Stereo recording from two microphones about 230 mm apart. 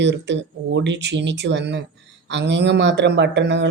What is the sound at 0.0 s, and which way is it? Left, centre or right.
Speech, right.